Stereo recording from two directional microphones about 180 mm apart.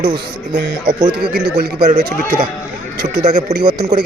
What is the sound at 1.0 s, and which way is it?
Speech, 30° right (ahead or behind).